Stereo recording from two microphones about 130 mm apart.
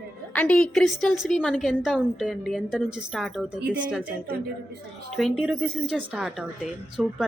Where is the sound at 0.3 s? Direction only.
10° left (ahead or behind).